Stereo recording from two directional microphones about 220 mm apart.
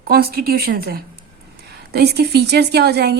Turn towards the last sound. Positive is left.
turn(degrees=-45)  # may be behind; listen again after turning